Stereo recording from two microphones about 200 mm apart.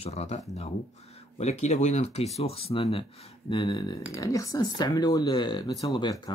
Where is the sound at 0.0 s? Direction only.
30° left (ahead or behind).